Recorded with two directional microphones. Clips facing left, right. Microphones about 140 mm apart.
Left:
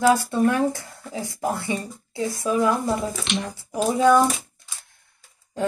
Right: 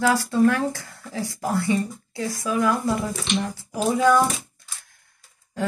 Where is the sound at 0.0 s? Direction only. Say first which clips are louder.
Even; 25° left (ahead or behind).